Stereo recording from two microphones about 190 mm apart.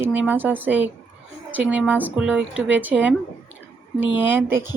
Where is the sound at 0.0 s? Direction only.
10° right (ahead or behind).